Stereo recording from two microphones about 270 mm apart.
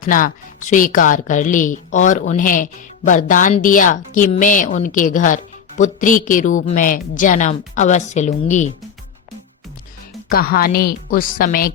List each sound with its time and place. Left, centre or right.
0.0 s speech: left
10.2 s a woman's voice: left